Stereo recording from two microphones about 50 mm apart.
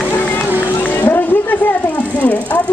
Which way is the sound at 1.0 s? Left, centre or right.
Left.